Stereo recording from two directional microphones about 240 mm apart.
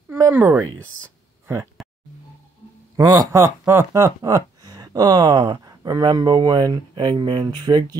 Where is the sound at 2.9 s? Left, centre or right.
Centre.